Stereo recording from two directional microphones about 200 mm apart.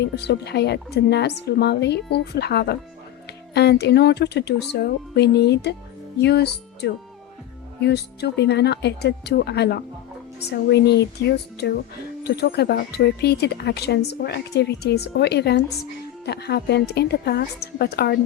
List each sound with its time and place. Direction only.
0.0 s speech: 55° left (ahead or behind)